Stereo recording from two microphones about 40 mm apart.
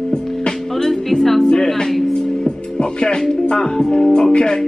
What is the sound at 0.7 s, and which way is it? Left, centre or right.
Music, centre.